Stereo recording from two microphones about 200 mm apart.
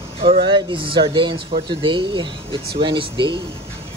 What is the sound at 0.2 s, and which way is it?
Speech, 25° right (ahead or behind).